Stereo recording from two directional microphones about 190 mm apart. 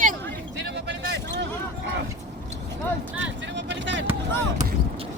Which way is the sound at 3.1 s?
70° right (ahead or behind).